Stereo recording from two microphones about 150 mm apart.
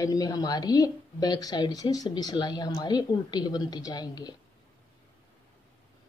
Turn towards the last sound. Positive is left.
turn(degrees=25)  # may be behind; listen again after turning